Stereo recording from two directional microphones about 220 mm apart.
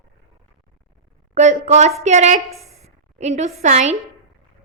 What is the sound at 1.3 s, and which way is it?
Speech, 30° right (ahead or behind).